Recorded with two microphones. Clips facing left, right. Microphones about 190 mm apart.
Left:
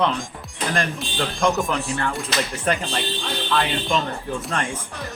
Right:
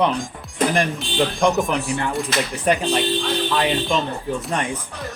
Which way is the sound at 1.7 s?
15° right (ahead or behind).